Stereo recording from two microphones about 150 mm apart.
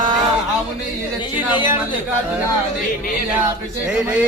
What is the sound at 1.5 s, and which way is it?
Speech, 30° left (ahead or behind).